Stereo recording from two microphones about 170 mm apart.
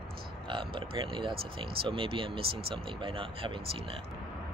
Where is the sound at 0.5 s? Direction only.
30° right (ahead or behind).